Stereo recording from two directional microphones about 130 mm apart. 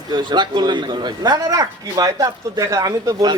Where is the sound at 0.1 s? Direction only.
35° right (ahead or behind).